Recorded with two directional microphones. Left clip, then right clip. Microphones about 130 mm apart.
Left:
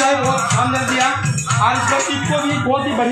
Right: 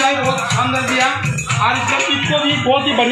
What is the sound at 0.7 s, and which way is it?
Music, 5° left (ahead or behind).